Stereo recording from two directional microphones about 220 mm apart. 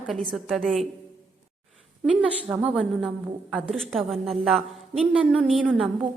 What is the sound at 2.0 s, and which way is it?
A woman's voice, 5° right (ahead or behind).